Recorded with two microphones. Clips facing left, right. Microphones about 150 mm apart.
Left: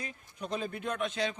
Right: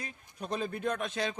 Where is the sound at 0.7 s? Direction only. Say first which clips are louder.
Right 1 dB; 45° right (ahead or behind).